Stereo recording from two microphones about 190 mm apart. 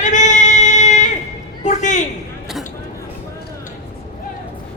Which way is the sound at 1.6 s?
40° left (ahead or behind).